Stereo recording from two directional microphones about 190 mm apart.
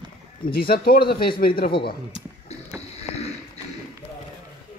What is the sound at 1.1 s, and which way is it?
Speech, 25° left (ahead or behind).